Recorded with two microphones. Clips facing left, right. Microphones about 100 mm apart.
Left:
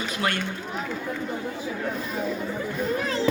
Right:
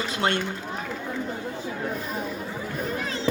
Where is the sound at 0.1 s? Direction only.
30° right (ahead or behind).